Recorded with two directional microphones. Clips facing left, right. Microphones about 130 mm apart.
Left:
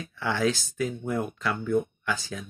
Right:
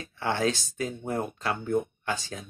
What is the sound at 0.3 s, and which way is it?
Speech, 35° right (ahead or behind).